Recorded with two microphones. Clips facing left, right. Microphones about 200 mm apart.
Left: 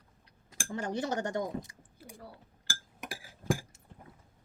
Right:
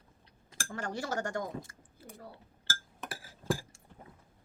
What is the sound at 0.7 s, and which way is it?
Speech, 20° left (ahead or behind).